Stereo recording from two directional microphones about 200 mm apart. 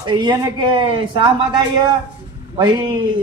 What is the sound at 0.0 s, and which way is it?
Speech, 20° right (ahead or behind).